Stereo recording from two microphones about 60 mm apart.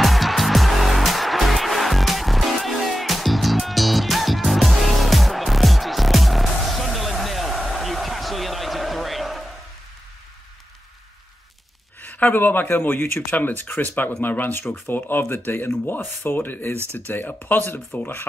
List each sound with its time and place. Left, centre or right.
0.0 s music: centre
12.0 s speech: left
15.7 s speech: left
16.7 s speech: right
17.0 s speech: left